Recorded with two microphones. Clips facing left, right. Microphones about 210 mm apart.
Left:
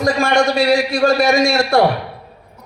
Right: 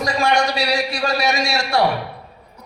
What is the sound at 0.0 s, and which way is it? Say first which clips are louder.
A man's voice: left 4 dB; 50° left (ahead or behind).